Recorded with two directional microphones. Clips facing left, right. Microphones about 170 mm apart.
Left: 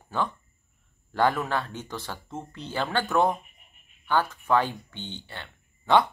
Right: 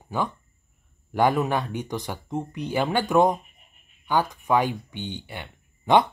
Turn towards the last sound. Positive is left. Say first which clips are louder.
# right 2 dB
turn(degrees=-15)  # may be behind; listen again after turning